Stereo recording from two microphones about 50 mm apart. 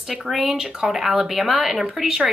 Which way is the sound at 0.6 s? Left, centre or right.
Centre.